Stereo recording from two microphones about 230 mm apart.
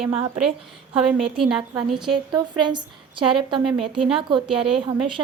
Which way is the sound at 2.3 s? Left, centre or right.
Centre.